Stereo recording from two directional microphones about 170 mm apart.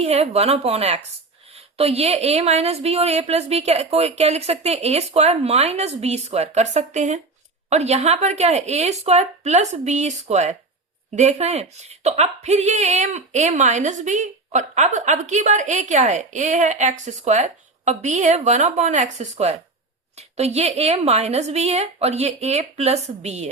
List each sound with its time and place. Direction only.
0.0 s a woman's voice: 40° right (ahead or behind)